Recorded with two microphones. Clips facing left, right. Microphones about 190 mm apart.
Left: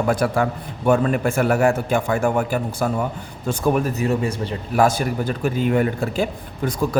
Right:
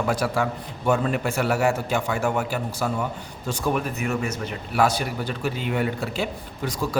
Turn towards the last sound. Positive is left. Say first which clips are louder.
# left 5 dB
turn(degrees=55)  # may be behind; listen again after turning